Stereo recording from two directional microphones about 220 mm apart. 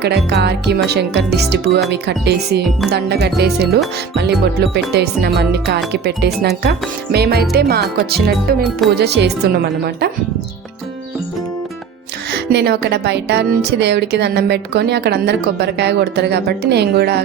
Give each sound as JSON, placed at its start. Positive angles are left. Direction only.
{"t": 0.0, "sound": "speech", "side_deg": -50}
{"t": 12.3, "sound": "speech", "side_deg": -50}